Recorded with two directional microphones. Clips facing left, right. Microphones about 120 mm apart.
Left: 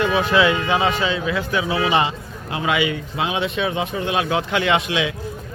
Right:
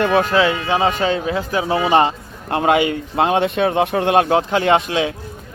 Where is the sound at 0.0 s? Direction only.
50° right (ahead or behind).